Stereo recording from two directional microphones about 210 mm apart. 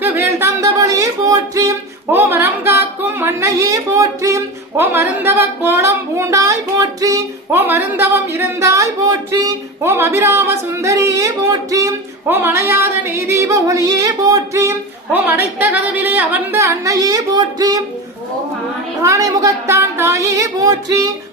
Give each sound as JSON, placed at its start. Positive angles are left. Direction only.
{"t": 0.0, "sound": "a sound", "side_deg": -10}
{"t": 11.7, "sound": "female singing", "side_deg": -15}
{"t": 19.0, "sound": "female singing", "side_deg": -15}